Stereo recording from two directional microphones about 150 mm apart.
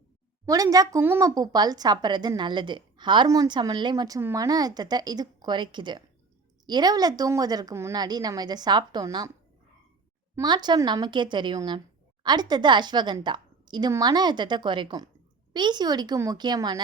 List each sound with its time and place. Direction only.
0.4 s a woman's voice: 25° right (ahead or behind)
10.3 s a woman's voice: 30° right (ahead or behind)